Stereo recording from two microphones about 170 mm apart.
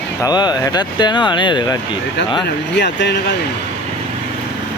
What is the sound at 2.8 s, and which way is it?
Speech, 90° left.